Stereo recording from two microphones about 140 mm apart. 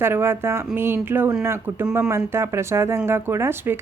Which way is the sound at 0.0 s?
15° right (ahead or behind).